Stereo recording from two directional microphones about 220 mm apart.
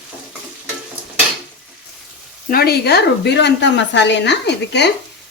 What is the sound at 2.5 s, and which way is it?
Speech, 45° left (ahead or behind).